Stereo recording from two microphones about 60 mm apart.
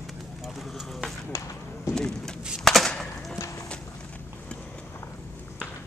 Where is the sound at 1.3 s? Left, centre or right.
Left.